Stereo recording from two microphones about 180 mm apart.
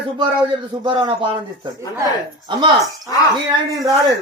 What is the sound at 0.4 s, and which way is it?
Speech, 25° right (ahead or behind).